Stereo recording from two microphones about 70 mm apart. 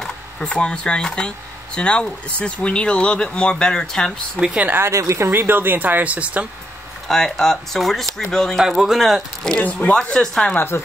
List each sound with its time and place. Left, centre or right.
0.0 s speech: centre
4.6 s a woman's voice: right
5.3 s speech: right
7.1 s speech: centre
8.5 s speech: centre
9.6 s speech: left
10.0 s speech: centre
10.5 s speech: left